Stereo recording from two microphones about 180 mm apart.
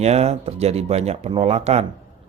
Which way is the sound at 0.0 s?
35° right (ahead or behind).